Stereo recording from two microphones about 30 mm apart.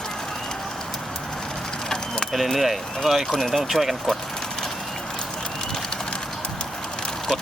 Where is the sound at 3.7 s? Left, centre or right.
Left.